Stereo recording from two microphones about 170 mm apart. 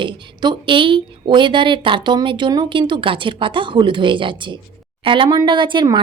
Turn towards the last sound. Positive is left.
turn(degrees=-25)  # may be behind; listen again after turning